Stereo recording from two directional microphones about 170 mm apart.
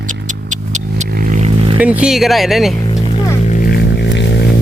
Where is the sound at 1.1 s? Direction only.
55° right (ahead or behind); by 1.8 s 35° right (ahead or behind).